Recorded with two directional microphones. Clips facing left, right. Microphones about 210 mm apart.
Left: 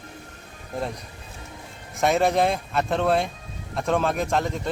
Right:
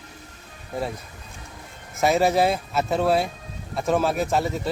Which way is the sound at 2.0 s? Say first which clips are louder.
Right 1 dB; 5° right (ahead or behind).